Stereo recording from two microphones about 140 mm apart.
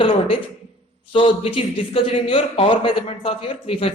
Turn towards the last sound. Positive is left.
turn(degrees=40)  # may be behind; listen again after turning